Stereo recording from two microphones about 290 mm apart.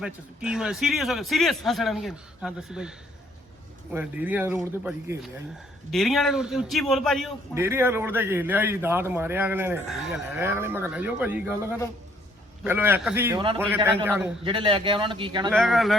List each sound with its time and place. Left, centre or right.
0.0 s a man's voice: centre
3.9 s a man's voice: centre
14.0 s a man's voice: centre
14.4 s a man's voice: centre
15.4 s a man's voice: centre